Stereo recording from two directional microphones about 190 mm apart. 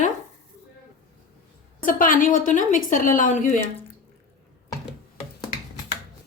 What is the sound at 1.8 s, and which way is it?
A woman's voice, 45° left (ahead or behind).